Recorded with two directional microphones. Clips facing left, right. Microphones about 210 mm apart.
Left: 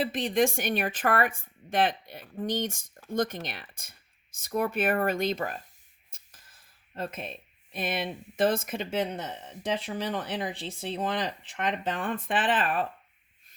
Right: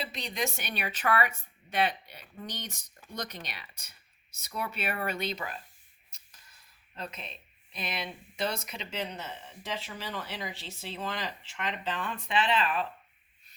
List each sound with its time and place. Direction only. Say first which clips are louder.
0.0 s speech: left 9 dB; 50° left (ahead or behind)